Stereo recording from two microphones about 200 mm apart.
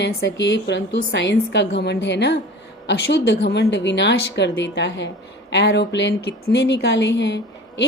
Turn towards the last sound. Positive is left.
turn(degrees=60)  # may be behind; listen again after turning